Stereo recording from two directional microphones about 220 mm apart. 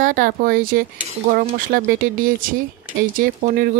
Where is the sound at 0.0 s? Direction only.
40° right (ahead or behind).